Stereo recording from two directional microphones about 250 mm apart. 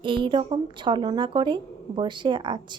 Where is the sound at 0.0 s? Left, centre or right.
Centre.